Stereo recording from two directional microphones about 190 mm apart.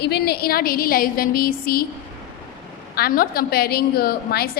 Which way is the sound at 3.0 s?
50° left (ahead or behind).